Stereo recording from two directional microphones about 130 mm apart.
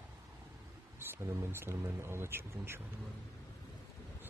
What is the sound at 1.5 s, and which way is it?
Speech, 20° right (ahead or behind).